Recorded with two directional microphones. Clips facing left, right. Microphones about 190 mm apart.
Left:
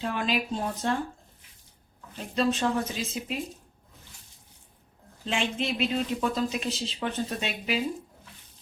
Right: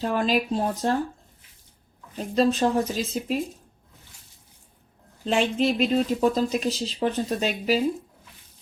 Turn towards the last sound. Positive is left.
turn(degrees=-40)  # may be behind; listen again after turning